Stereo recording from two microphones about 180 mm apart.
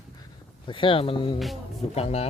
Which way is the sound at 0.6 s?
30° left (ahead or behind).